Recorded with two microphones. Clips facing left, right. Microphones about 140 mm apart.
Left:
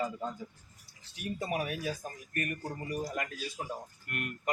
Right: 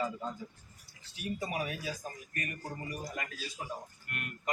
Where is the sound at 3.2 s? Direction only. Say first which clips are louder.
Left 4 dB; 50° left (ahead or behind).